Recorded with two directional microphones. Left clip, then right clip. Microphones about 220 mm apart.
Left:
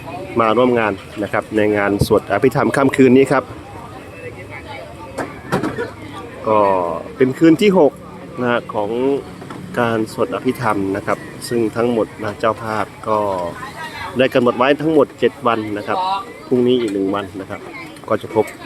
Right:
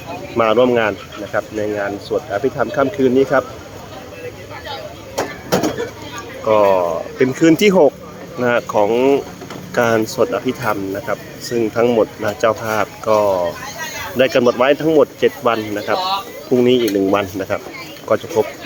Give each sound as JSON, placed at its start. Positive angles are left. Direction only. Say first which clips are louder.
{"t": 0.3, "sound": "speech", "louder": "right 1 dB", "side_deg": 0}
{"t": 1.3, "sound": "speech", "louder": "left 3 dB", "side_deg": 15}
{"t": 5.1, "sound": "a sound", "louder": "right 3 dB", "side_deg": -45}
{"t": 6.4, "sound": "speech", "louder": "right 2 dB", "side_deg": 0}